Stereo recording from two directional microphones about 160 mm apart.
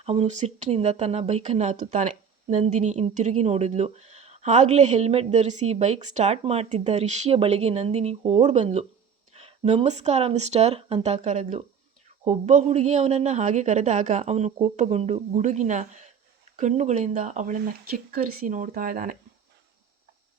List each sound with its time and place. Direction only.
0.0 s speech: 40° right (ahead or behind); by 19.1 s 60° right (ahead or behind)